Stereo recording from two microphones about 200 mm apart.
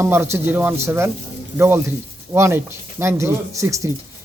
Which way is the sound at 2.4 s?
10° right (ahead or behind).